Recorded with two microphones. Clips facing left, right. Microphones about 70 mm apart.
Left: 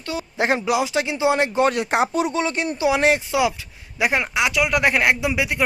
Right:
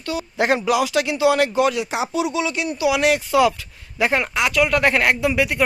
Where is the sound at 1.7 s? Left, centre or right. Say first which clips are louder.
Left 3 dB; left.